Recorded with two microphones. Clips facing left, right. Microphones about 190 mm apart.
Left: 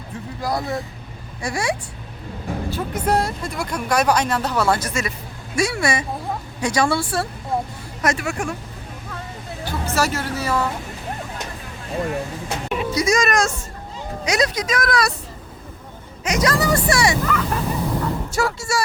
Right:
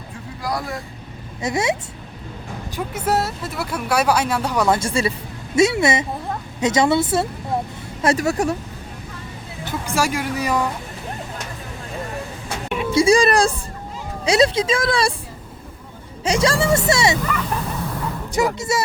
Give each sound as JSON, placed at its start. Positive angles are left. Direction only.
{"t": 0.4, "sound": "speech", "side_deg": 25}
{"t": 1.4, "sound": "speech", "side_deg": -20}
{"t": 2.6, "sound": "speech", "side_deg": -10}
{"t": 8.0, "sound": "speech", "side_deg": -35}
{"t": 9.6, "sound": "speech", "side_deg": -15}
{"t": 12.6, "sound": "music", "side_deg": 0}
{"t": 12.9, "sound": "speech", "side_deg": -30}
{"t": 16.2, "sound": "speech", "side_deg": -30}
{"t": 17.2, "sound": "speech", "side_deg": 0}
{"t": 18.3, "sound": "speech", "side_deg": -20}